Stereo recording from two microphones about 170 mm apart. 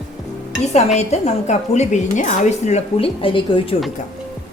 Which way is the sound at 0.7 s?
40° left (ahead or behind).